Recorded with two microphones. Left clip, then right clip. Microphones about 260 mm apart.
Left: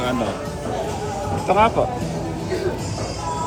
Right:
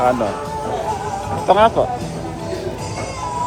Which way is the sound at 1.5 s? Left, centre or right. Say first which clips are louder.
Right 4 dB; right.